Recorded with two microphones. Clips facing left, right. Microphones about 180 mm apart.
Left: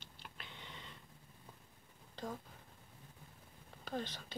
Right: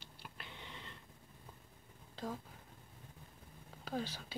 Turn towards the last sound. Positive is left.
turn(degrees=-5)  # may be behind; listen again after turning